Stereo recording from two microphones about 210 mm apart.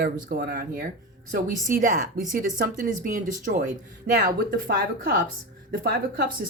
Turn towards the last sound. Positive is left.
turn(degrees=-50)  # may be behind; listen again after turning